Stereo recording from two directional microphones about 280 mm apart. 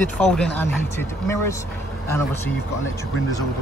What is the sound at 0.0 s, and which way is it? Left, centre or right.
Speech, centre.